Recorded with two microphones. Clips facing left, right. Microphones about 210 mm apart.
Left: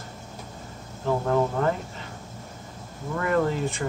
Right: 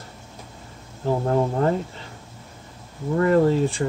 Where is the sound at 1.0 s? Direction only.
35° right (ahead or behind).